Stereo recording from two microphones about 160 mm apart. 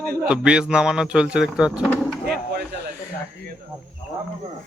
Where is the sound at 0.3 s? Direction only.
5° right (ahead or behind).